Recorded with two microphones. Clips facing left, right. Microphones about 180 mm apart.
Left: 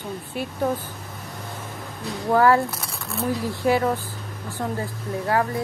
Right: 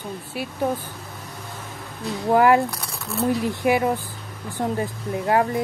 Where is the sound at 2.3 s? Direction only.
15° right (ahead or behind).